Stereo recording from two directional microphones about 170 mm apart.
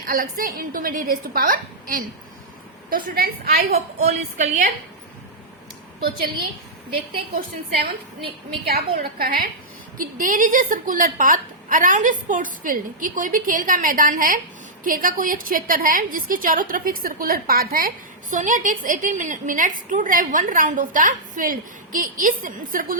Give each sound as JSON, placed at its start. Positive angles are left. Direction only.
{"t": 0.0, "sound": "a woman's voice", "side_deg": -55}
{"t": 4.0, "sound": "a woman's voice", "side_deg": -50}
{"t": 8.6, "sound": "a woman's voice", "side_deg": -60}